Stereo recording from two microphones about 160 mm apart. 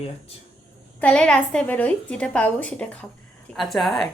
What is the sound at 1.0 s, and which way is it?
A woman's voice, 5° left (ahead or behind).